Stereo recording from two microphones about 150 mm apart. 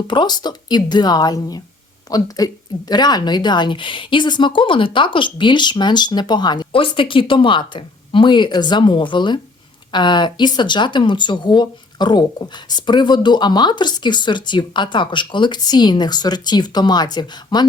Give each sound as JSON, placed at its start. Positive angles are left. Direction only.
{"t": 0.1, "sound": "speech", "side_deg": 30}